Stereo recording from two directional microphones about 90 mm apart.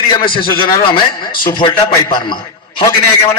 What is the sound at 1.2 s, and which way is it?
Speech, 60° left (ahead or behind).